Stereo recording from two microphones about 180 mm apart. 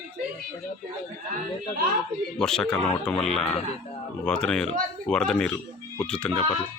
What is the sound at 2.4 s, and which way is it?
Speech, 5° left (ahead or behind).